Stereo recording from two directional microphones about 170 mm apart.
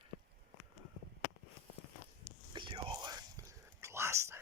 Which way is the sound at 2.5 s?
30° right (ahead or behind).